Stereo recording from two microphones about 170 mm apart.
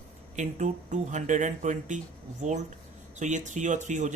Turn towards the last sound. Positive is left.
turn(degrees=-45)  # may be behind; listen again after turning